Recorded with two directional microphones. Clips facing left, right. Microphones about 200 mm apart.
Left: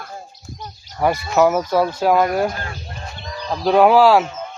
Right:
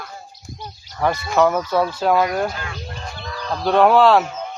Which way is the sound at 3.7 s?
5° left (ahead or behind).